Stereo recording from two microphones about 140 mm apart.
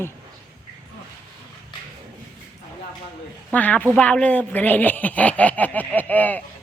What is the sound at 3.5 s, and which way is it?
Speech, 10° left (ahead or behind).